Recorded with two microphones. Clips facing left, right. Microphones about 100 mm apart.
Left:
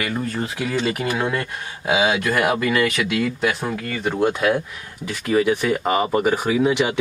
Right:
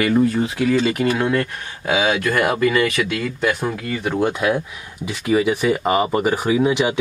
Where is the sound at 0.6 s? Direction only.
5° left (ahead or behind).